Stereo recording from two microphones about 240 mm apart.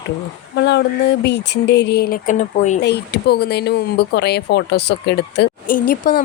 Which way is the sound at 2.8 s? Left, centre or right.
Left.